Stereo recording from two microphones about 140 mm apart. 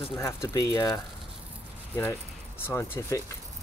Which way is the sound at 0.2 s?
20° left (ahead or behind).